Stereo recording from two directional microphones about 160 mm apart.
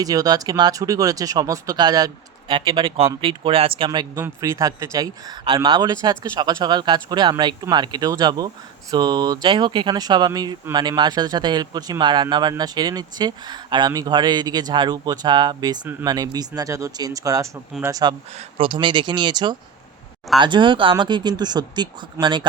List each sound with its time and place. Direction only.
0.0 s speech: 25° right (ahead or behind)
18.3 s speech: 35° right (ahead or behind)